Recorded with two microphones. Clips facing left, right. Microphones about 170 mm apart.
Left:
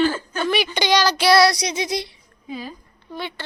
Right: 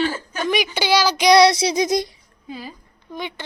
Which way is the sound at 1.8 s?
45° right (ahead or behind).